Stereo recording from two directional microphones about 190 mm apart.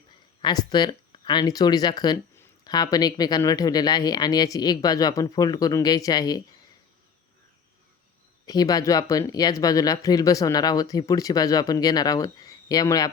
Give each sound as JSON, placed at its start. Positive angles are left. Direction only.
{"t": 0.4, "sound": "speech", "side_deg": 20}
{"t": 8.4, "sound": "speech", "side_deg": 20}